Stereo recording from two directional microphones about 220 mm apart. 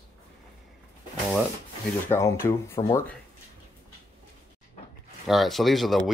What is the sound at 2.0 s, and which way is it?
Speech, 10° left (ahead or behind).